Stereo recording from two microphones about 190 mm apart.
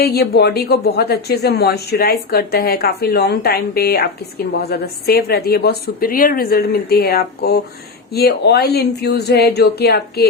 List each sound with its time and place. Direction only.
0.0 s a woman's voice: 55° left (ahead or behind)